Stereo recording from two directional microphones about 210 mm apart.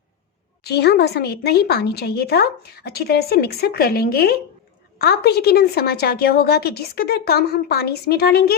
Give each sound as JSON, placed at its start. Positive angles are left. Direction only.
{"t": 0.6, "sound": "a woman's voice", "side_deg": 50}